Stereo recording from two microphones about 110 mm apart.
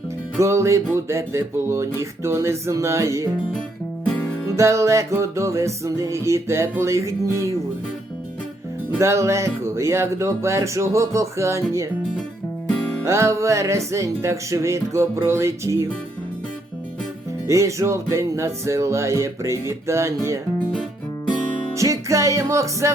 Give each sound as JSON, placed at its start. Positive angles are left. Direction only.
{"t": 0.3, "sound": "music", "side_deg": -25}
{"t": 4.5, "sound": "music", "side_deg": -25}
{"t": 9.0, "sound": "music", "side_deg": -25}
{"t": 13.1, "sound": "music", "side_deg": -25}
{"t": 17.4, "sound": "music", "side_deg": -25}
{"t": 21.8, "sound": "music", "side_deg": -30}